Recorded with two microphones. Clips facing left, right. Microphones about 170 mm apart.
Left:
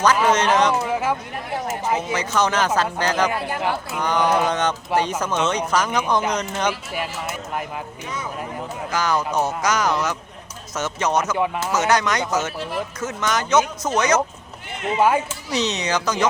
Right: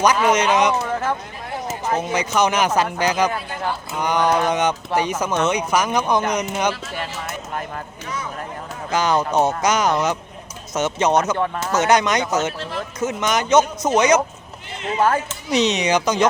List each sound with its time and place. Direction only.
0.0 s speech: 15° right (ahead or behind)
0.9 s a sound: 10° left (ahead or behind)
1.9 s speech: 5° left (ahead or behind)
2.1 s speech: 15° right (ahead or behind)
6.7 s speech: 10° left (ahead or behind)
8.9 s speech: 20° right (ahead or behind)
11.3 s speech: 10° left (ahead or behind)
11.7 s speech: 20° right (ahead or behind)
14.9 s speech: 10° left (ahead or behind)
15.4 s speech: 20° right (ahead or behind)